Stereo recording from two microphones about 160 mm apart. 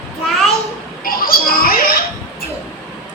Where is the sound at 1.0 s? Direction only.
65° left (ahead or behind).